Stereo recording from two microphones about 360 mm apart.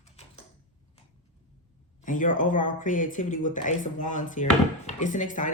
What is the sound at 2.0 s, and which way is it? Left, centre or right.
Speech, left.